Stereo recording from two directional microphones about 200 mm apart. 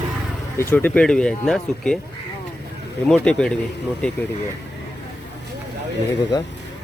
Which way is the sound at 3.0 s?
5° left (ahead or behind).